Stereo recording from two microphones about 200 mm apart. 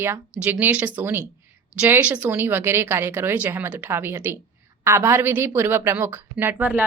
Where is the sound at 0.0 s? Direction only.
10° right (ahead or behind).